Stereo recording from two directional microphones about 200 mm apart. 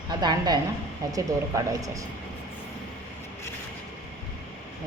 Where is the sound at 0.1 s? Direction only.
20° right (ahead or behind).